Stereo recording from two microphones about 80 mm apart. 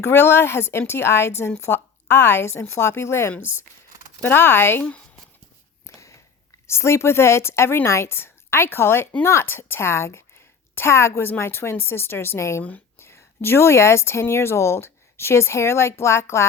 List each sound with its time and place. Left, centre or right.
0.0 s a woman's voice: left
4.8 s speech: centre
5.8 s a sound: left
6.7 s a woman's voice: left